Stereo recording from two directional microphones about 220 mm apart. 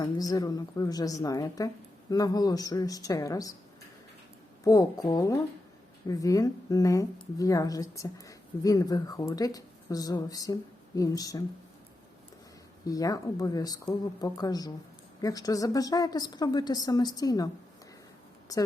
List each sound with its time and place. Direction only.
0.0 s a woman's voice: 15° left (ahead or behind)
4.6 s a woman's voice: 15° left (ahead or behind)
12.8 s a woman's voice: 15° left (ahead or behind)
18.5 s a woman's voice: 15° left (ahead or behind)